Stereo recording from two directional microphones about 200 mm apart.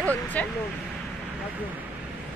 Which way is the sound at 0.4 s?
5° left (ahead or behind).